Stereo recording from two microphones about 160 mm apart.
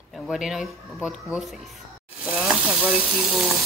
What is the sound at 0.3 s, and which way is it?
Speech, centre (ahead or behind).